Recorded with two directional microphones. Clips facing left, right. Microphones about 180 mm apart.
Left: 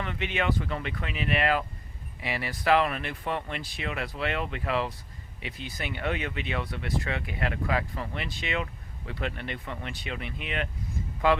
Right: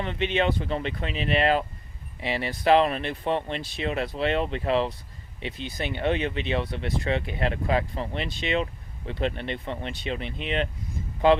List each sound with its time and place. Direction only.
0.0 s speech: 25° right (ahead or behind)